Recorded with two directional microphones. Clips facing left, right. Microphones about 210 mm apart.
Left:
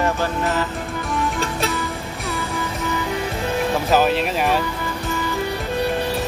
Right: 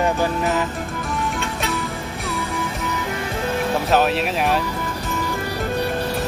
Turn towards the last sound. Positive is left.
turn(degrees=0)  # may be behind; listen again after turning